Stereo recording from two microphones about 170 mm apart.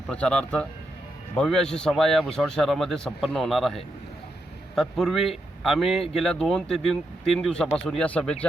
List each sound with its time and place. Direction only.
0.1 s a man's voice: 5° left (ahead or behind)